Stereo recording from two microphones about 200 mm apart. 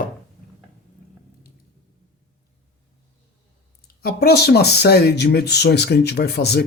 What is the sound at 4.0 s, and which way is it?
Speech, 50° left (ahead or behind).